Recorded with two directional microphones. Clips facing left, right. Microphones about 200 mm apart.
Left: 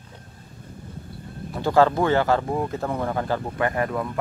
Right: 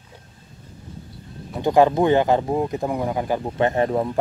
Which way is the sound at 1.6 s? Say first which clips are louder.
Right 3 dB; 15° right (ahead or behind).